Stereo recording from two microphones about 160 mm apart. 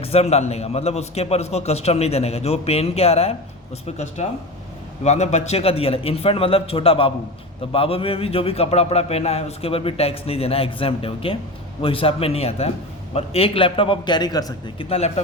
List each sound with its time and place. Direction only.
0.0 s speech: 40° left (ahead or behind); by 14.8 s 25° left (ahead or behind)
14.8 s speech: 40° left (ahead or behind)